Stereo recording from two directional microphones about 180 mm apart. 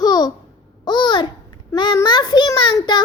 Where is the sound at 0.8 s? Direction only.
25° left (ahead or behind).